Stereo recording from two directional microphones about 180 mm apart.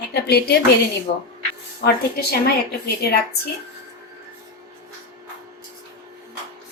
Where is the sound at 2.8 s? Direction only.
60° left (ahead or behind).